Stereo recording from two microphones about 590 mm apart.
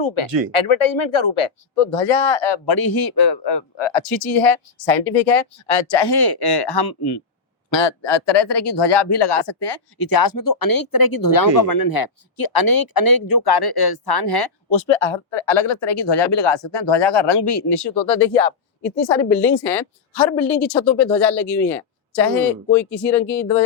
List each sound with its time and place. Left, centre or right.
0.0 s speech: left
18.2 s a woman's voice: centre